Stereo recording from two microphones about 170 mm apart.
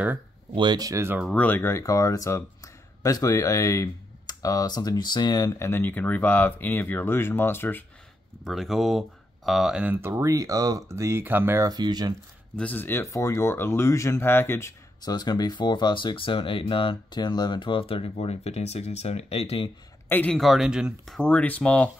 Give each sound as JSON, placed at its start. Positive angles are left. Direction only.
{"t": 0.6, "sound": "speech", "side_deg": -25}
{"t": 1.3, "sound": "speech", "side_deg": 10}
{"t": 8.5, "sound": "speech", "side_deg": 0}
{"t": 12.5, "sound": "speech", "side_deg": 10}
{"t": 20.1, "sound": "speech", "side_deg": 10}
{"t": 21.2, "sound": "speech", "side_deg": 10}